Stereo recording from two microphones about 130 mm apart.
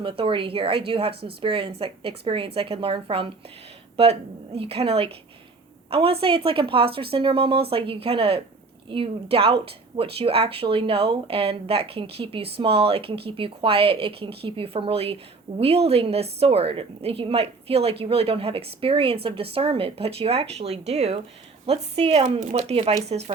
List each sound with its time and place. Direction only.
0.0 s speech: 40° right (ahead or behind)